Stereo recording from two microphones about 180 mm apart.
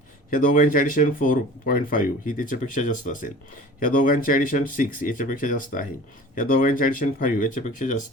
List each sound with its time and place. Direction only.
0.3 s speech: 50° left (ahead or behind)